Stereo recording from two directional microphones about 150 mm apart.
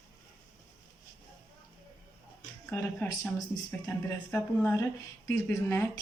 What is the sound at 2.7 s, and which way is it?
Speech, 15° left (ahead or behind).